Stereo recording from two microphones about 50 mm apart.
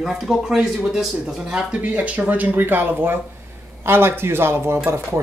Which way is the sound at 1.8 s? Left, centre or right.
Right.